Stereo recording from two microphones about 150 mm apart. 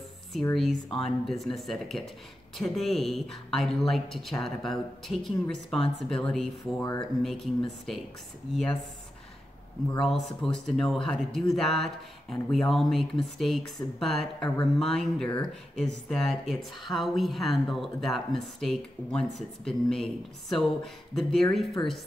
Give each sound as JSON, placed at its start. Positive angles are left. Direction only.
{"t": 0.3, "sound": "speech", "side_deg": 5}
{"t": 9.9, "sound": "speech", "side_deg": 0}